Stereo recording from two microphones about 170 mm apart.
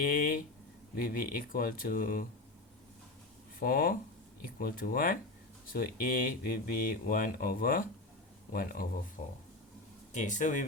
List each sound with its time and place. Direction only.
0.0 s speech: 55° left (ahead or behind)
3.6 s speech: 60° left (ahead or behind)
10.1 s speech: 45° left (ahead or behind)